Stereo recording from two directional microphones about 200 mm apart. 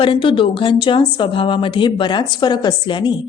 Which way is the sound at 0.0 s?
25° left (ahead or behind).